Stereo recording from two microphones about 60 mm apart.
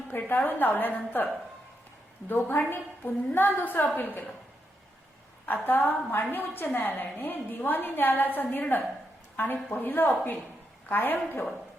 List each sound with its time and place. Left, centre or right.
0.1 s a woman's voice: left
2.3 s a woman's voice: left
5.6 s a woman's voice: left